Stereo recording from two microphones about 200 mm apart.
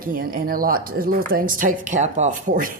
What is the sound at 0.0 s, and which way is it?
Speech, 45° right (ahead or behind).